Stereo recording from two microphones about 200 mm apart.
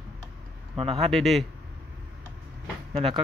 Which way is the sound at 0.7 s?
30° right (ahead or behind).